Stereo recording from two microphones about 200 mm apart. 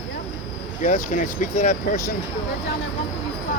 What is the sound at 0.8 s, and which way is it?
Speech, 40° left (ahead or behind).